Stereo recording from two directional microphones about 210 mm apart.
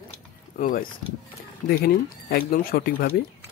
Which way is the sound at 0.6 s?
40° left (ahead or behind).